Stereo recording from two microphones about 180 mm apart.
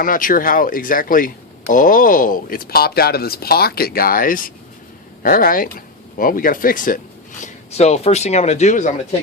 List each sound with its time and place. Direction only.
0.0 s speech: 50° left (ahead or behind)
7.4 s speech: 35° left (ahead or behind)